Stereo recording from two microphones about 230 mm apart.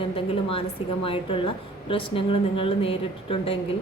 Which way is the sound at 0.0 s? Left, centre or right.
Left.